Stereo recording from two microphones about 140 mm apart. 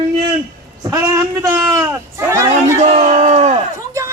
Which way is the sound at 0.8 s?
25° right (ahead or behind).